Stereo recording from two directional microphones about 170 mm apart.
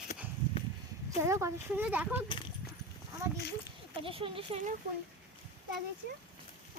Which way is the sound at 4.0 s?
30° right (ahead or behind).